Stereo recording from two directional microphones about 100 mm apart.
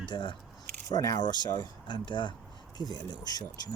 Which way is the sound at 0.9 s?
40° left (ahead or behind).